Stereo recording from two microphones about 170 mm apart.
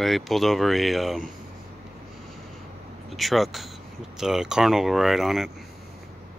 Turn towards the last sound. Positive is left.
turn(degrees=0)  # may be behind; listen again after turning